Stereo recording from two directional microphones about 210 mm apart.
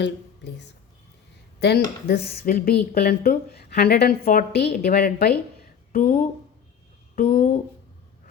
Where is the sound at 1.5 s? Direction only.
50° left (ahead or behind).